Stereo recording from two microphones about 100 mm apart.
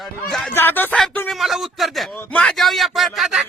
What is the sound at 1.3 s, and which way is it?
Speech, centre (ahead or behind).